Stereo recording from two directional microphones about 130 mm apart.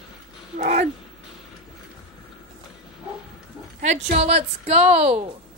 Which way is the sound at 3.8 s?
60° right (ahead or behind).